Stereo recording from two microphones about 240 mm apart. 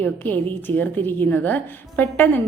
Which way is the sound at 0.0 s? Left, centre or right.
Centre.